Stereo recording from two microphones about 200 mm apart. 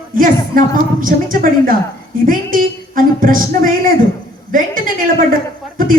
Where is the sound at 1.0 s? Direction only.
45° right (ahead or behind).